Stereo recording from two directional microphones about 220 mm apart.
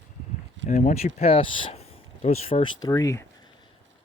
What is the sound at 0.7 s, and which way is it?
Speech, 35° left (ahead or behind).